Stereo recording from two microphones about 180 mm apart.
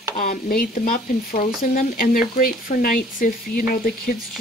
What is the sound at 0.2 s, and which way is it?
Speech, 50° left (ahead or behind).